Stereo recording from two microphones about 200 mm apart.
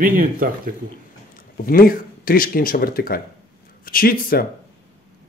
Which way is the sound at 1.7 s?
45° left (ahead or behind).